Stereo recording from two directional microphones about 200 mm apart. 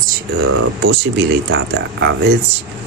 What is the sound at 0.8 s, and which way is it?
Speech, 60° right (ahead or behind).